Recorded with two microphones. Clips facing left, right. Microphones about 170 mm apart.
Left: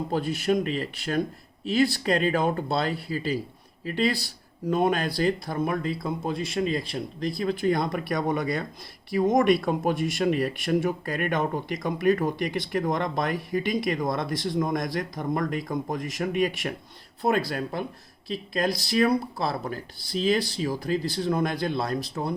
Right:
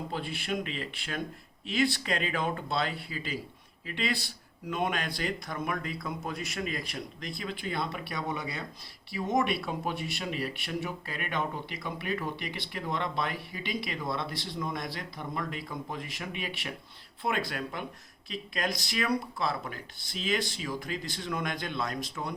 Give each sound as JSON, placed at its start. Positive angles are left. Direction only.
{"t": 0.1, "sound": "speech", "side_deg": 40}